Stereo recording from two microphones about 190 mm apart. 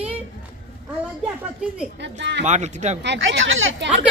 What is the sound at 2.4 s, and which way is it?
Speech, 40° right (ahead or behind).